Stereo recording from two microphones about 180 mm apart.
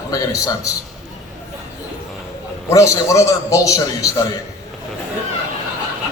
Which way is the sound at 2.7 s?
15° left (ahead or behind).